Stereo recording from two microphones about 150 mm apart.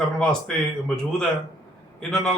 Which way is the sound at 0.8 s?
5° left (ahead or behind).